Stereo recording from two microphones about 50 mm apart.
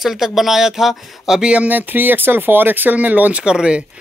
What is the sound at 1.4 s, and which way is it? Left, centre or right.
Speech, right.